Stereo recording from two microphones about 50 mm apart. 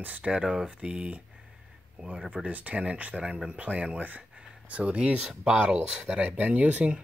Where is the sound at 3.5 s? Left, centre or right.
Right.